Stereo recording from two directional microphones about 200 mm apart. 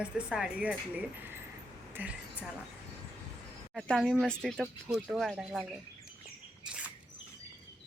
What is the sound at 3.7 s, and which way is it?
Speech, centre (ahead or behind).